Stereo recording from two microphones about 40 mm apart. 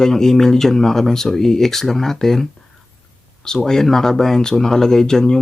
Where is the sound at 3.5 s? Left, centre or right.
Centre.